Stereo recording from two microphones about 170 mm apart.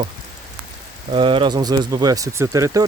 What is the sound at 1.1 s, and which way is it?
Speech, 30° right (ahead or behind).